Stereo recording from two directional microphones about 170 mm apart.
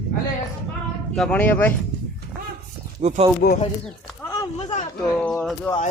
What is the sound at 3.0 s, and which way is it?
Speech, 40° right (ahead or behind).